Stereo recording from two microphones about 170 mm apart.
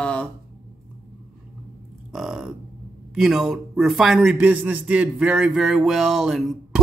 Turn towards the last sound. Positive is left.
turn(degrees=0)  # may be behind; listen again after turning